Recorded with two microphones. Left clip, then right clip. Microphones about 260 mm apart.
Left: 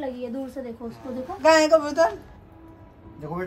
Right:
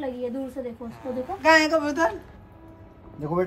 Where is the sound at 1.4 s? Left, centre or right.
Left.